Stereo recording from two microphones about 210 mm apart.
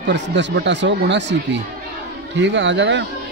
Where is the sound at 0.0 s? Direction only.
55° right (ahead or behind).